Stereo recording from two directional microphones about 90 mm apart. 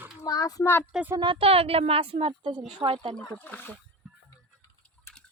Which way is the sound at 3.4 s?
15° left (ahead or behind).